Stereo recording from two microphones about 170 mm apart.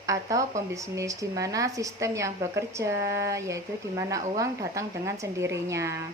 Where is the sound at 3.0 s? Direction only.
85° right.